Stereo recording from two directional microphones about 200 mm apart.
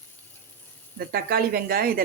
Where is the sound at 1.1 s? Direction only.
50° right (ahead or behind).